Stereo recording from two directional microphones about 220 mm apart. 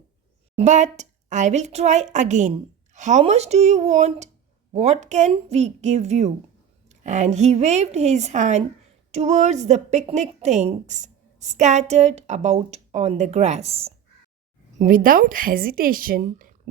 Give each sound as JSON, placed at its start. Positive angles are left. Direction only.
{"t": 0.5, "sound": "a woman's voice", "side_deg": -30}
{"t": 14.8, "sound": "a woman's voice", "side_deg": -40}